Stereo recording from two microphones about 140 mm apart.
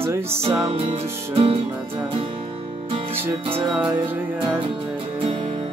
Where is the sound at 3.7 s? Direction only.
10° right (ahead or behind).